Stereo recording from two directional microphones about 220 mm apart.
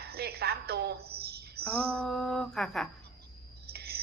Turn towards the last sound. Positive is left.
turn(degrees=-45)  # may be behind; listen again after turning